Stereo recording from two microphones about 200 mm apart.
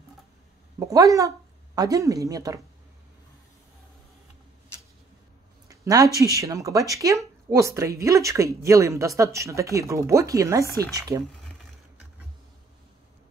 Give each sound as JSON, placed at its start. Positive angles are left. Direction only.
{"t": 0.7, "sound": "a woman's voice", "side_deg": -15}
{"t": 5.7, "sound": "a sound", "side_deg": -15}
{"t": 6.3, "sound": "speech", "side_deg": -15}